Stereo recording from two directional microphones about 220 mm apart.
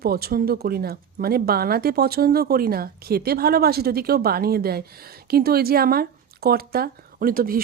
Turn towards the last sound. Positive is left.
turn(degrees=-40)  # may be behind; listen again after turning